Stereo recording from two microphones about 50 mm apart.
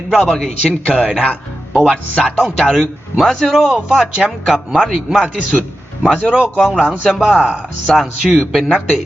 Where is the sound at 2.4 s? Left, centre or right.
Centre.